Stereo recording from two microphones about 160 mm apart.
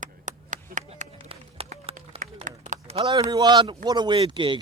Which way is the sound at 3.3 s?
25° right (ahead or behind).